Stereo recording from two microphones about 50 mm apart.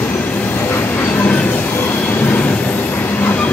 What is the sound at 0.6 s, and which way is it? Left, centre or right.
Train, left.